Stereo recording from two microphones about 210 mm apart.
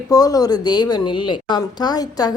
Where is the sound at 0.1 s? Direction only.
15° left (ahead or behind).